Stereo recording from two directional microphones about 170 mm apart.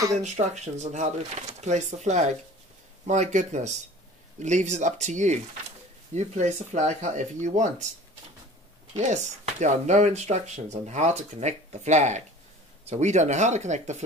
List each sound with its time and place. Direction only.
0.1 s speech: 45° right (ahead or behind)
8.9 s speech: 45° right (ahead or behind)